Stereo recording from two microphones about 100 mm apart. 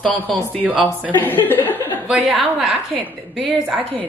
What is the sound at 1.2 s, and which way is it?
Speech, 20° left (ahead or behind).